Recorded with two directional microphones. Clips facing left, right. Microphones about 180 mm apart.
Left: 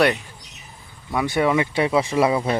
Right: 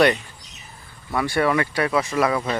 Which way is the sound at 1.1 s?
15° left (ahead or behind).